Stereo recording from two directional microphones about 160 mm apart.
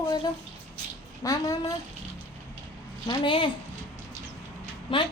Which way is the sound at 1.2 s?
20° left (ahead or behind).